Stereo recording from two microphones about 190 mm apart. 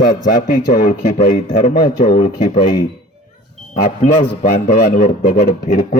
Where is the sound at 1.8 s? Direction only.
30° left (ahead or behind).